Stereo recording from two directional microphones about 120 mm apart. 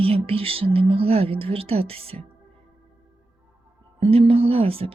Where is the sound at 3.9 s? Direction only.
55° right (ahead or behind).